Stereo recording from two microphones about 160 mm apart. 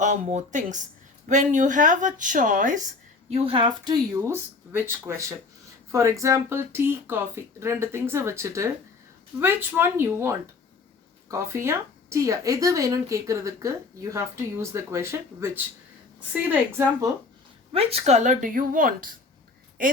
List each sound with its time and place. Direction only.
0.0 s speech: 50° right (ahead or behind)
3.2 s speech: 35° right (ahead or behind)
4.3 s speech: 15° right (ahead or behind)
17.7 s speech: 40° right (ahead or behind); by 19.1 s 60° right (ahead or behind)